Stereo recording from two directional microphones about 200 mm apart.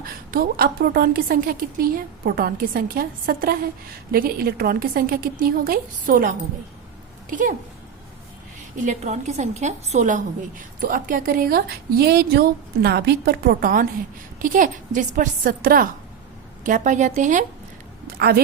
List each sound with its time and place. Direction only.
0.0 s a woman's voice: 50° right (ahead or behind)
8.7 s a woman's voice: 40° right (ahead or behind)
18.2 s a woman's voice: 50° right (ahead or behind)